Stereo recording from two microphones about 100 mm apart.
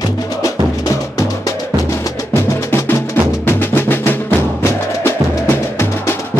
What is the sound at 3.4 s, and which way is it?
Music, 20° left (ahead or behind).